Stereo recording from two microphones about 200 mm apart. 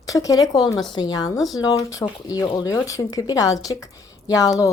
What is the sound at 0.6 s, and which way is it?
Speech, centre (ahead or behind).